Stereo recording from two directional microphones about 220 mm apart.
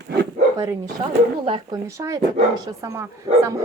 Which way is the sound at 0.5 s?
15° right (ahead or behind).